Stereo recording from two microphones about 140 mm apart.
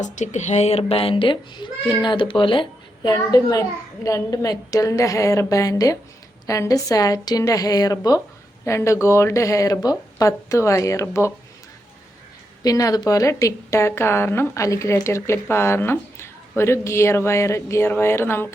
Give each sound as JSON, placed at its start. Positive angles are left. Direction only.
{"t": 0.0, "sound": "a child's voice", "side_deg": 60}
{"t": 12.6, "sound": "a woman's voice", "side_deg": 25}